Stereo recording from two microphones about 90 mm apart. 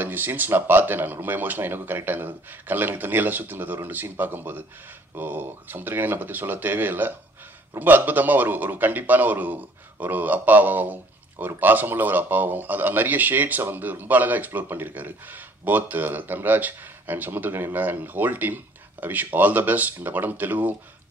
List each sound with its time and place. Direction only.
0.0 s a man's voice: 20° right (ahead or behind)